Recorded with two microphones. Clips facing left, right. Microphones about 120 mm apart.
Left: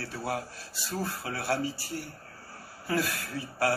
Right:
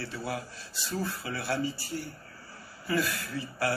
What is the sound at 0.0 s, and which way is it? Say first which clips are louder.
Speech: left 2 dB; 60° left (ahead or behind).